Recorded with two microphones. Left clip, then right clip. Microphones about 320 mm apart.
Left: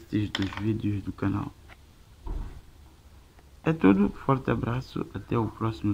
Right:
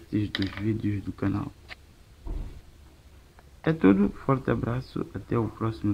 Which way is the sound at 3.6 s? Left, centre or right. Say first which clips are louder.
Right 1 dB; centre.